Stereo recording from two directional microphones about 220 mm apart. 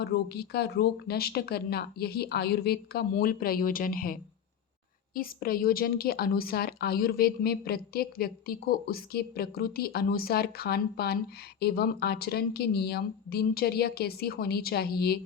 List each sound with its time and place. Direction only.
0.0 s a woman's voice: 45° left (ahead or behind)